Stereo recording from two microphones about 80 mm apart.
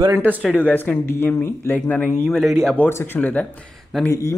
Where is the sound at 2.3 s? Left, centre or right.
Centre.